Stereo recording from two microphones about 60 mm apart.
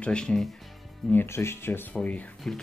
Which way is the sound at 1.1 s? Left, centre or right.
Left.